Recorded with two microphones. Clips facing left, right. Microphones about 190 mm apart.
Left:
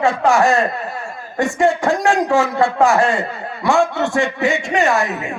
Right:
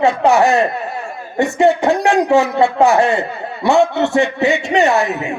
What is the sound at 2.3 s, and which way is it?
Speech, 20° right (ahead or behind).